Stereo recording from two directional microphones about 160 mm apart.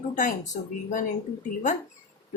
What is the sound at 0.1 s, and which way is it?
Speech, 55° left (ahead or behind).